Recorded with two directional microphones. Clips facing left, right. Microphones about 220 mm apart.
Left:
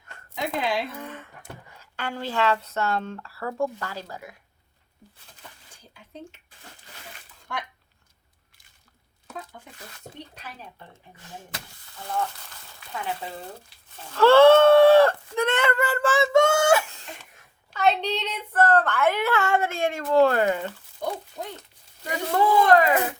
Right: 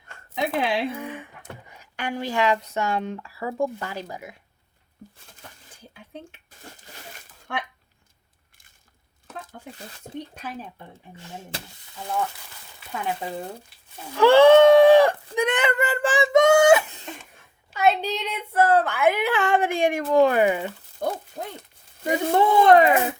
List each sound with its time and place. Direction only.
0.3 s a sound: 60° right (ahead or behind)
0.9 s a woman's voice: 15° right (ahead or behind)
10.3 s speech: 50° right (ahead or behind)
14.1 s a sound: 15° right (ahead or behind)
17.7 s a woman's voice: 5° right (ahead or behind)
21.0 s speech: 55° right (ahead or behind)
22.0 s speech: 25° right (ahead or behind)